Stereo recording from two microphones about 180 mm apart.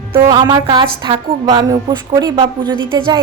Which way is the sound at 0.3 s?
25° right (ahead or behind).